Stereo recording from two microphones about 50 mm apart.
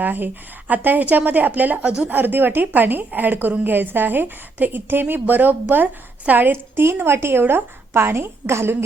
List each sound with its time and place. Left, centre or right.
0.0 s a woman's voice: right
6.9 s a woman's voice: right